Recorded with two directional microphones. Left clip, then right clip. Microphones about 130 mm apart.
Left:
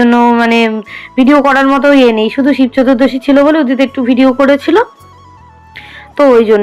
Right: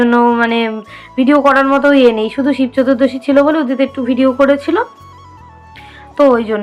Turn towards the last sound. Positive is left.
turn(degrees=35)  # may be behind; listen again after turning